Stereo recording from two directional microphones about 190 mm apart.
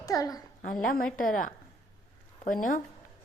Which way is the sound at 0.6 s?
45° left (ahead or behind).